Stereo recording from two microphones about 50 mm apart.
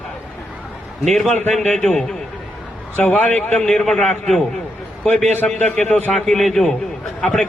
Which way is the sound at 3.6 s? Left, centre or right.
Centre.